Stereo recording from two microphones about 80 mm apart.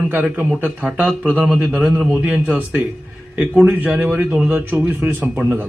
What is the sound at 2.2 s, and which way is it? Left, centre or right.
A man's voice, right.